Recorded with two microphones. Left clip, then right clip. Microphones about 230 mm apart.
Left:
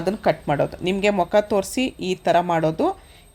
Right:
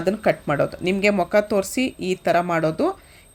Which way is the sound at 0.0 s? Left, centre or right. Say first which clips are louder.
Right 1 dB; centre.